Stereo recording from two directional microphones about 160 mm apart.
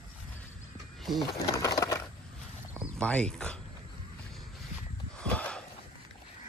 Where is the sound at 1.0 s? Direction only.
Centre (ahead or behind).